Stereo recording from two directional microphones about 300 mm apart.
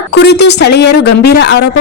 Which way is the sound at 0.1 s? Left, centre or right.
Left.